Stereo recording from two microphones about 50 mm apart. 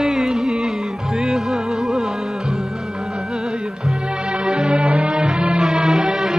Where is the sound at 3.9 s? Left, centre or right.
Centre.